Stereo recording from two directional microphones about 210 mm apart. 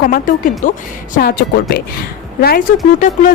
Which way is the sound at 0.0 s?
40° left (ahead or behind).